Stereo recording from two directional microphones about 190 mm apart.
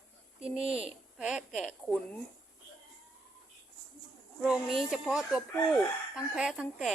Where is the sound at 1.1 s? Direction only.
5° right (ahead or behind).